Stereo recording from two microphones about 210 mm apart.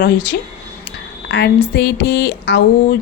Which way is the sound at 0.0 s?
60° left (ahead or behind).